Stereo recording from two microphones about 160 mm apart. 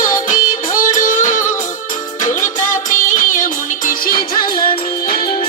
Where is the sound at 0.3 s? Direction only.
55° left (ahead or behind).